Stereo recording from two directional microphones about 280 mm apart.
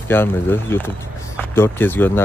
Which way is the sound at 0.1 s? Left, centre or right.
Centre.